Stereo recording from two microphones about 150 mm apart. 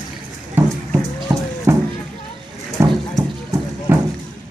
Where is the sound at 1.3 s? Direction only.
25° right (ahead or behind).